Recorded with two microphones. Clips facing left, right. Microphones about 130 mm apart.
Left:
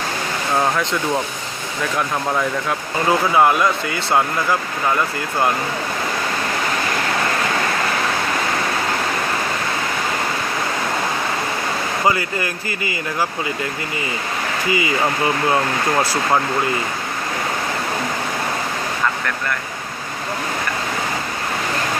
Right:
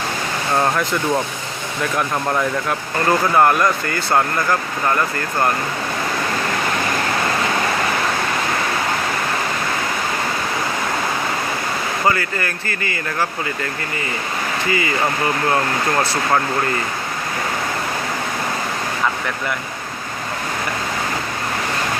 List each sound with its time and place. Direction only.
0.5 s speech: centre (ahead or behind)
12.0 s speech: 15° left (ahead or behind)
14.7 s speech: 15° left (ahead or behind)